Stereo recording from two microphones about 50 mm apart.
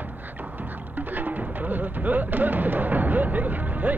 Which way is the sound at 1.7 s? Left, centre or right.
Right.